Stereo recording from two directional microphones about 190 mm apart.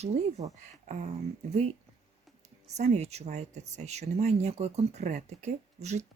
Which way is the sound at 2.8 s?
35° right (ahead or behind).